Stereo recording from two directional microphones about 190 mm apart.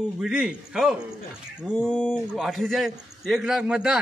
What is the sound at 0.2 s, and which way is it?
A man's voice, 5° right (ahead or behind).